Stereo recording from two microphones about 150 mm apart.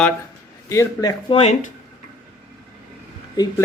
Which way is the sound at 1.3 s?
40° left (ahead or behind).